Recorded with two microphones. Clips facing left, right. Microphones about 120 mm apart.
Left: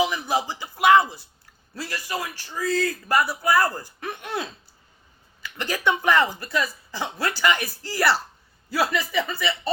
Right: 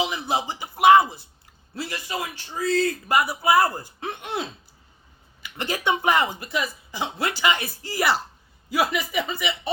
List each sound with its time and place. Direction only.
0.0 s speech: 20° right (ahead or behind)